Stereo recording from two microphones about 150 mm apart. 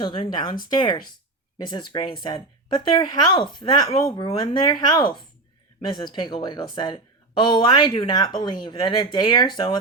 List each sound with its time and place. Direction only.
0.0 s speech: 35° left (ahead or behind)